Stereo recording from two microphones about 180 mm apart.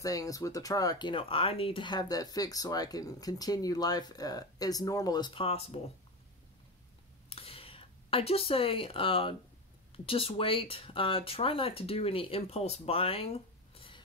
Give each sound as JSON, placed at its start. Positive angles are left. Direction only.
{"t": 0.0, "sound": "speech", "side_deg": 20}
{"t": 7.2, "sound": "a sound", "side_deg": 30}
{"t": 9.9, "sound": "speech", "side_deg": 30}